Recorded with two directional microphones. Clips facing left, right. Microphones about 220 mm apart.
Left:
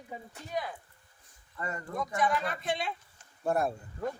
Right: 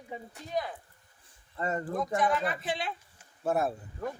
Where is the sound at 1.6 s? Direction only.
35° right (ahead or behind).